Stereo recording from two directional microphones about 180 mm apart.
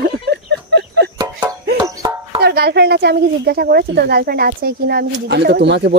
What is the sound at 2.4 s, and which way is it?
Speech, 60° right (ahead or behind).